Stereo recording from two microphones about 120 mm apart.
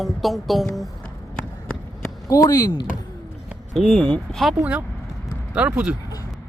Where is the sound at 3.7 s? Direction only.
5° left (ahead or behind).